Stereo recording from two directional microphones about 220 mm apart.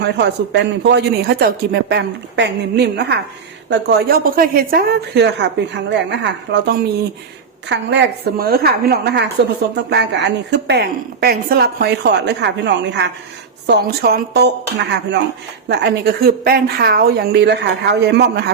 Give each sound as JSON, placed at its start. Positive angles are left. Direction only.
{"t": 0.0, "sound": "a woman's voice", "side_deg": -50}